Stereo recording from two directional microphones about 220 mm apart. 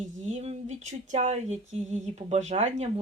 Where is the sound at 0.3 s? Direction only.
30° right (ahead or behind).